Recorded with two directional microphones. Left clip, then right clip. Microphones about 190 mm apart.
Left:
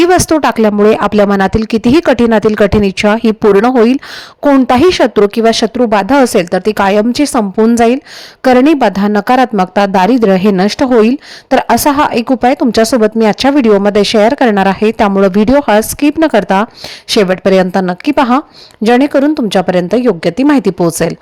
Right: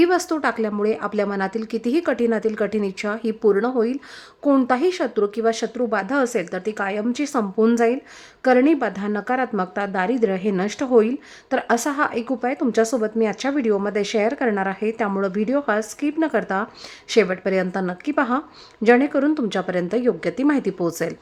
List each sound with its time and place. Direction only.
0.0 s speech: 45° left (ahead or behind)
8.4 s a woman's voice: 45° left (ahead or behind)